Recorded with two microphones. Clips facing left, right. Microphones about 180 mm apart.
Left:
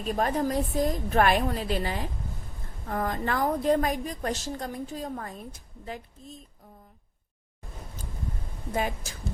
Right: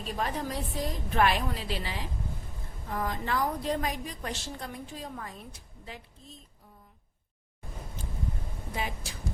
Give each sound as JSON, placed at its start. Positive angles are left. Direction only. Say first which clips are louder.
{"t": 0.0, "sound": "a woman's voice", "louder": "left 6 dB", "side_deg": 45}
{"t": 8.7, "sound": "a woman's voice", "louder": "left 6 dB", "side_deg": 45}